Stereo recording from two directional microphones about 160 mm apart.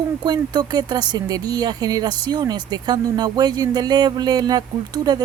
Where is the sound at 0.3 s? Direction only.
25° right (ahead or behind).